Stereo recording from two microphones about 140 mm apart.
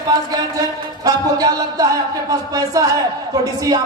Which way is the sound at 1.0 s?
25° right (ahead or behind).